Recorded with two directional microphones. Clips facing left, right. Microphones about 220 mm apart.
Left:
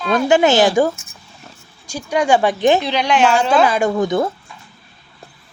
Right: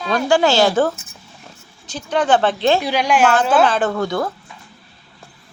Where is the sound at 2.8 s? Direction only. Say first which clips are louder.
Even; 10° right (ahead or behind).